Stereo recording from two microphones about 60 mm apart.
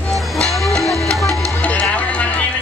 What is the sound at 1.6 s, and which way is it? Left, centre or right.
Music, left.